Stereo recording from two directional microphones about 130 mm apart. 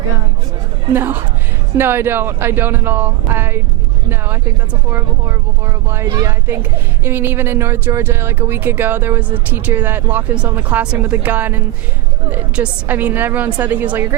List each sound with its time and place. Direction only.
0.9 s a woman's voice: 15° right (ahead or behind)
4.9 s a woman's voice: 20° right (ahead or behind)